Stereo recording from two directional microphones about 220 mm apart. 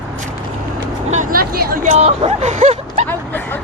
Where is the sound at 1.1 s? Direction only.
40° right (ahead or behind).